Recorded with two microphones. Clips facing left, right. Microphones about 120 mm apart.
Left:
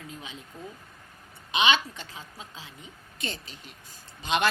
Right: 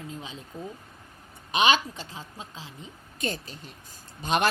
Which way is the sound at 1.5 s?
40° right (ahead or behind).